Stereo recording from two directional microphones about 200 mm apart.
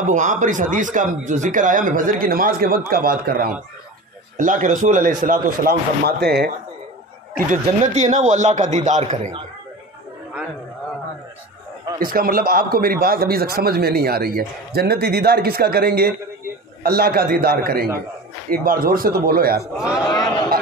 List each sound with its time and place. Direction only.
0.0 s a man's voice: 40° right (ahead or behind); by 6.5 s 55° right (ahead or behind)
7.3 s speech: 40° right (ahead or behind)
12.0 s a man's voice: 45° right (ahead or behind)
19.8 s a man's voice: 5° right (ahead or behind)